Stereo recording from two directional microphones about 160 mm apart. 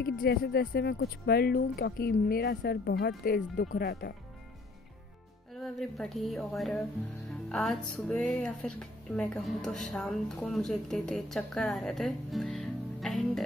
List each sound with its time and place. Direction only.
0.0 s speech: 65° left (ahead or behind)
5.6 s speech: centre (ahead or behind)